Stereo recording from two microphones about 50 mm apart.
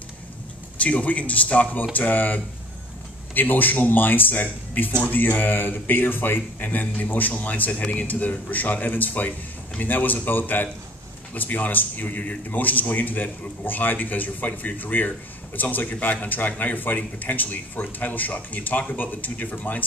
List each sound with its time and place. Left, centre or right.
0.7 s speech: left